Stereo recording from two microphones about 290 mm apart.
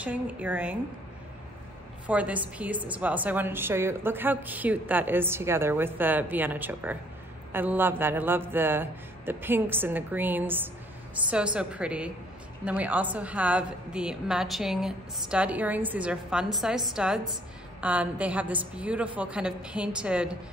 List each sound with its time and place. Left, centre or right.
0.0 s a woman's voice: centre
2.0 s a woman's voice: centre